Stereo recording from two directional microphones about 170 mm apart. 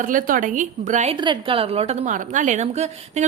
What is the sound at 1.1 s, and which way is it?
A woman's voice, 30° right (ahead or behind).